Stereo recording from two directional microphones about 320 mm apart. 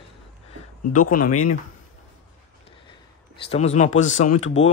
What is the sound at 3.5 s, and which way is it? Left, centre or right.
Speech, left.